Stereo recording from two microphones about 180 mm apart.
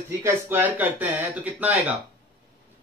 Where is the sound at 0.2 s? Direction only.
10° right (ahead or behind).